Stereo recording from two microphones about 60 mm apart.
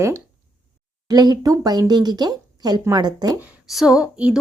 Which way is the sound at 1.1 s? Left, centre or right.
Right.